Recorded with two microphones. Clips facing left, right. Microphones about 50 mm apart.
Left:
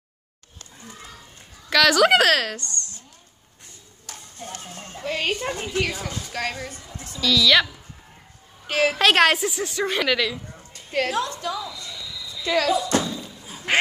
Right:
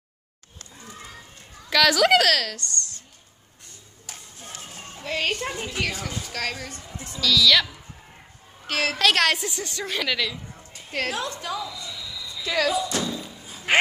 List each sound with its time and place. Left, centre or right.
1.7 s speech: centre; by 2.9 s left
4.0 s a sound: centre
5.0 s speech: centre
8.6 s speech: centre
9.4 s a woman's voice: centre
11.8 s slam: centre
13.0 s thump: centre